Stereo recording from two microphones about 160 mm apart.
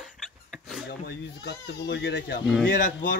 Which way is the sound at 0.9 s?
90° left.